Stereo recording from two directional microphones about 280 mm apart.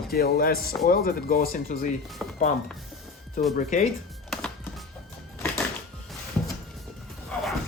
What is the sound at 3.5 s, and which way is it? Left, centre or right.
Speech, left.